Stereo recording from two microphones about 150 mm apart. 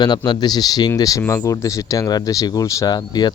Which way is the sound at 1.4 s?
20° left (ahead or behind).